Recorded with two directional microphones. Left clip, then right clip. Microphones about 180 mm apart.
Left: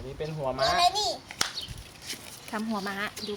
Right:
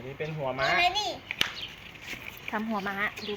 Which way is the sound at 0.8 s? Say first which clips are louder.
Left 2 dB; 70° left (ahead or behind).